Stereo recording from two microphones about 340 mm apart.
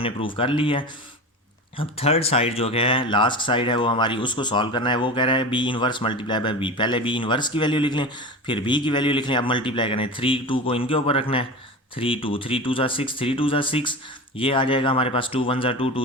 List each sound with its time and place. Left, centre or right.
0.0 s speech: centre